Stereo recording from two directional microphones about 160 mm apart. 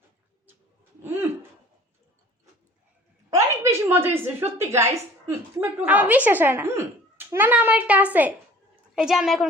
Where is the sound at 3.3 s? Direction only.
20° right (ahead or behind).